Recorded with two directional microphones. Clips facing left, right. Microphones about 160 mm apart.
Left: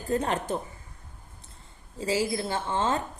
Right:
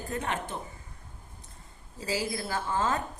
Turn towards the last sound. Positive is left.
turn(degrees=25)  # may be behind; listen again after turning